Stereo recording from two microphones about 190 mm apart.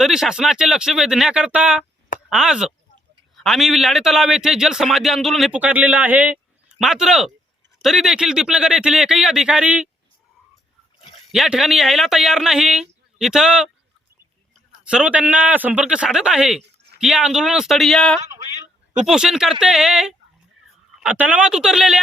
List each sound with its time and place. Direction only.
0.0 s a man's voice: 5° right (ahead or behind)
11.3 s a man's voice: 5° right (ahead or behind)
14.8 s a man's voice: 5° right (ahead or behind)